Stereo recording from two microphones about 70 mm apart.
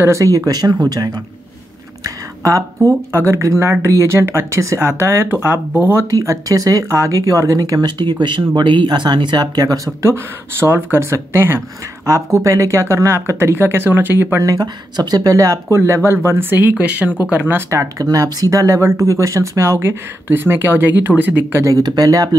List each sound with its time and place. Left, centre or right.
0.0 s speech: right
0.5 s speech: right
2.0 s speech: right
6.0 s speech: right
6.9 s speech: right
10.0 s speech: right
14.4 s speech: right
16.7 s speech: centre
17.6 s speech: right
21.6 s speech: right